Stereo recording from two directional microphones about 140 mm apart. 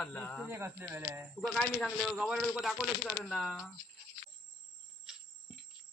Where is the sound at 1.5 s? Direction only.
Centre (ahead or behind).